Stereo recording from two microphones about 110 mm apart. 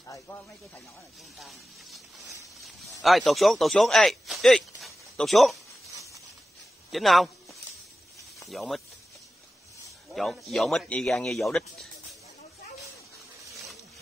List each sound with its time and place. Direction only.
0.0 s speech: 30° left (ahead or behind)
1.4 s a sound: centre (ahead or behind)
3.0 s speech: centre (ahead or behind)
6.9 s speech: centre (ahead or behind)
8.5 s speech: centre (ahead or behind)
10.1 s speech: centre (ahead or behind)